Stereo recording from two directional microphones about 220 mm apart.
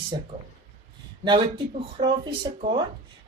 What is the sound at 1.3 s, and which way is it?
Speech, 20° right (ahead or behind).